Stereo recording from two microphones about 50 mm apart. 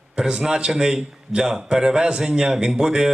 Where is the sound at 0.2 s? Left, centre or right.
Centre.